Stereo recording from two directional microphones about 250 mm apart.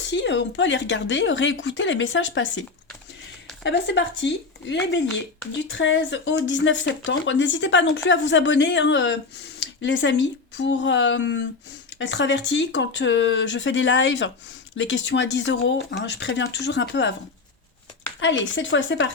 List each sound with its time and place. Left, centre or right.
0.1 s speech: left
18.2 s speech: left